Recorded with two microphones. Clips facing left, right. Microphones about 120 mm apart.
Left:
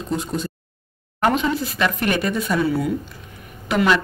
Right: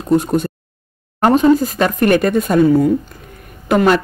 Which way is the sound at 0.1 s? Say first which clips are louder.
Right 11 dB; 55° right (ahead or behind).